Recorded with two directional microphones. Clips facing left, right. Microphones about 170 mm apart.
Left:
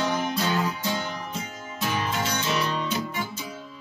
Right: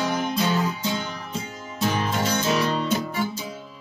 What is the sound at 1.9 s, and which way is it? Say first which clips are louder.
Music: right 2 dB; 40° right (ahead or behind).